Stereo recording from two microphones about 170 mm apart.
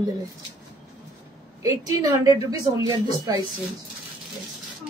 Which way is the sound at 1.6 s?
20° right (ahead or behind).